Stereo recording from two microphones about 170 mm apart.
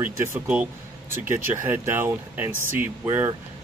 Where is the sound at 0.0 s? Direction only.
10° right (ahead or behind).